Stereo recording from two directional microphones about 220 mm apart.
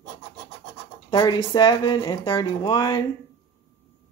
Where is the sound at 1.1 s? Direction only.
20° left (ahead or behind).